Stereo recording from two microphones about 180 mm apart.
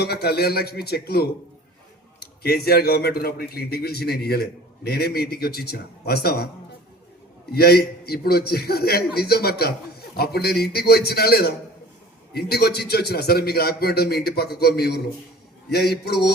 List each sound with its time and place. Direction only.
0.0 s a man's voice: 65° left (ahead or behind)
7.5 s a man's voice: 60° left (ahead or behind)